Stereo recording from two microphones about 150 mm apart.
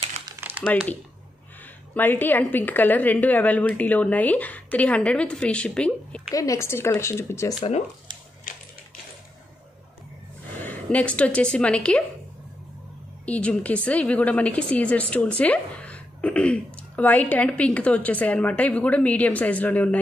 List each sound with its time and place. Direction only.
0.4 s crumpling: 15° right (ahead or behind)
2.0 s a woman's voice: 10° left (ahead or behind)
6.3 s a woman's voice: 20° left (ahead or behind)
8.5 s typewriter: 60° left (ahead or behind)
10.6 s a woman's voice: 10° left (ahead or behind)
13.2 s a woman's voice: 10° left (ahead or behind)